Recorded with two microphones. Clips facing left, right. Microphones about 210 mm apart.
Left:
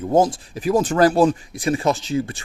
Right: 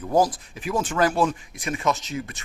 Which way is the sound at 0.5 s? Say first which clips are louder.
Left 7 dB; 35° left (ahead or behind).